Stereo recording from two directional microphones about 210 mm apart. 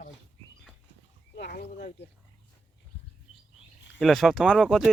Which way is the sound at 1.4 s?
45° left (ahead or behind).